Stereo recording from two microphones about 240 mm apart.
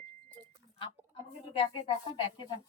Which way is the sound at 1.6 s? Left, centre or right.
Left.